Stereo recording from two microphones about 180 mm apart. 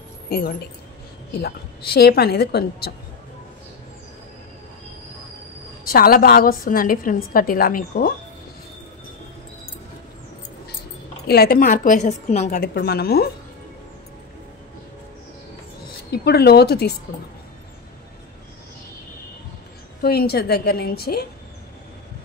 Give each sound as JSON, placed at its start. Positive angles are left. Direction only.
{"t": 0.3, "sound": "a woman's voice", "side_deg": 60}
{"t": 5.9, "sound": "a woman's voice", "side_deg": 55}
{"t": 11.2, "sound": "a woman's voice", "side_deg": 60}
{"t": 12.5, "sound": "a woman's voice", "side_deg": 60}
{"t": 16.1, "sound": "a woman's voice", "side_deg": 65}
{"t": 20.0, "sound": "a woman's voice", "side_deg": 60}